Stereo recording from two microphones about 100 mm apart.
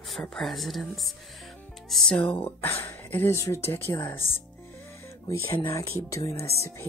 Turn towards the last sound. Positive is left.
turn(degrees=30)  # may be behind; listen again after turning